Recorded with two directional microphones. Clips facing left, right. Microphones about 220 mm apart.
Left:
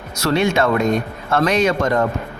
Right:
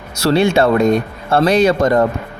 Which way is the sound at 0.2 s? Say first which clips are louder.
Right 4 dB; 30° right (ahead or behind).